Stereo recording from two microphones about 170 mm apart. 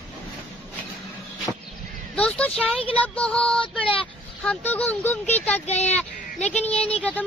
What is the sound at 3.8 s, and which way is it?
Child singing, 30° left (ahead or behind).